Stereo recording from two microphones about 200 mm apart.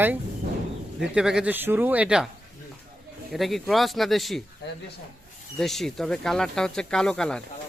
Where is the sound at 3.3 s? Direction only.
Centre (ahead or behind).